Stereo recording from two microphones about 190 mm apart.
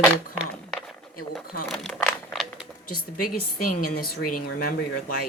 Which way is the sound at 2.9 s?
50° left (ahead or behind).